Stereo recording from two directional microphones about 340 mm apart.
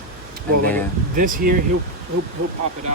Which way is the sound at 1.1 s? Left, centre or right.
Right.